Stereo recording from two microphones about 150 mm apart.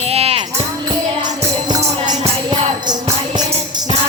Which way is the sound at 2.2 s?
30° right (ahead or behind).